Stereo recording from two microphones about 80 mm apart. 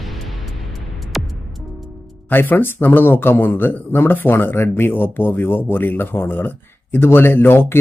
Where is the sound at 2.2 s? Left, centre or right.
Left.